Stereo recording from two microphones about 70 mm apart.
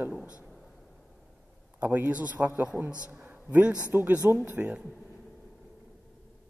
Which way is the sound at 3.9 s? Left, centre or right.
Right.